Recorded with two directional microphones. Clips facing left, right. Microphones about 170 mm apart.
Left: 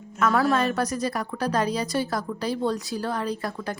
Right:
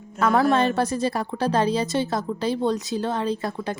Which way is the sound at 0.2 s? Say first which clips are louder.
Right 3 dB; 30° right (ahead or behind).